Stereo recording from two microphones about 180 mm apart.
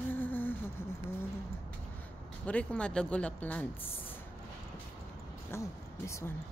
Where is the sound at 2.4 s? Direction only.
5° left (ahead or behind).